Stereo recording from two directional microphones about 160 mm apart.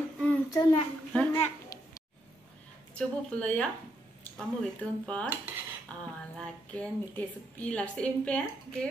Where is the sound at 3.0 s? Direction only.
5° left (ahead or behind).